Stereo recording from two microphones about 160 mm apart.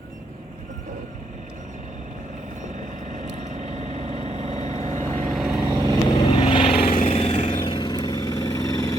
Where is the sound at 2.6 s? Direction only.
50° right (ahead or behind).